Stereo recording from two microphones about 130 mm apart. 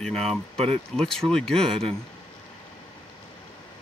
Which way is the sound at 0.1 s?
50° right (ahead or behind).